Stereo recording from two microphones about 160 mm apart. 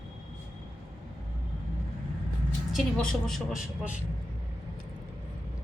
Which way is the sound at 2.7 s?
5° left (ahead or behind).